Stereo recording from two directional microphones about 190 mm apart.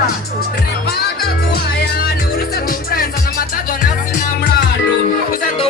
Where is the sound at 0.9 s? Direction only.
55° left (ahead or behind).